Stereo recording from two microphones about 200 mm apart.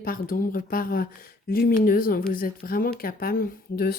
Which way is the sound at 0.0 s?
45° left (ahead or behind).